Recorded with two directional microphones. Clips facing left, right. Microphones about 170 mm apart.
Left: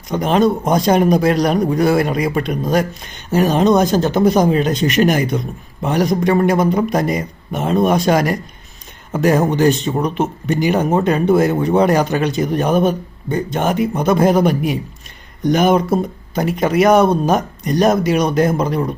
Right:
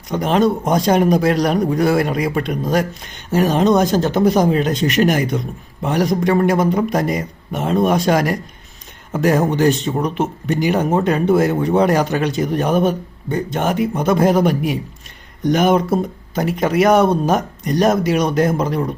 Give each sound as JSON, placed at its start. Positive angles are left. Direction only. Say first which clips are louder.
{"t": 0.1, "sound": "speech", "louder": "left 1 dB", "side_deg": 15}